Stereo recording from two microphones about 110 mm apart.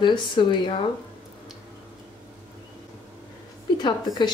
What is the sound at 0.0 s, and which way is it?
Speech, 45° left (ahead or behind).